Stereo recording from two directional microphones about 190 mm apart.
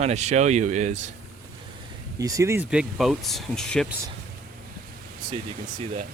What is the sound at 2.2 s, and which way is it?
Speech, 15° right (ahead or behind).